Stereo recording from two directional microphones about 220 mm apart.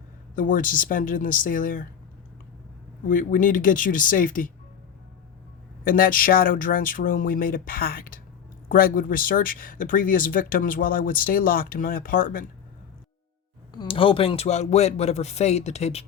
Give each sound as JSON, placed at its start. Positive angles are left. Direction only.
{"t": 0.3, "sound": "speech", "side_deg": 40}
{"t": 3.1, "sound": "speech", "side_deg": 35}
{"t": 5.8, "sound": "speech", "side_deg": 40}
{"t": 13.7, "sound": "a man's voice", "side_deg": 25}